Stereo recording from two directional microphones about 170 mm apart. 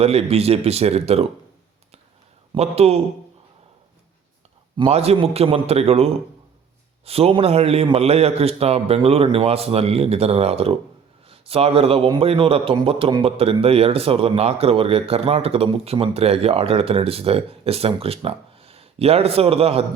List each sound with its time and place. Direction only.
0.0 s a man's voice: 35° right (ahead or behind)
2.6 s a man's voice: 35° right (ahead or behind)
4.8 s a man's voice: 35° right (ahead or behind)